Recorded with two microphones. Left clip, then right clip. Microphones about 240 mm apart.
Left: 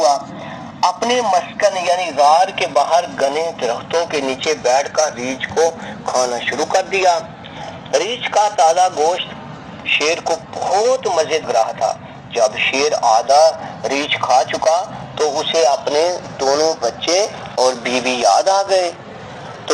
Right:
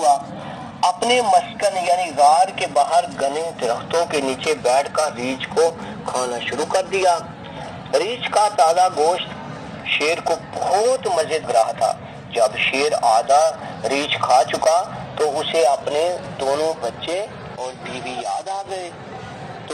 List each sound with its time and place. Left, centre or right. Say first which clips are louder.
0.9 s speech: left 1 dB; centre
3.7 s speech: left 2 dB; centre; by 17.2 s left
17.6 s speech: left 14 dB; left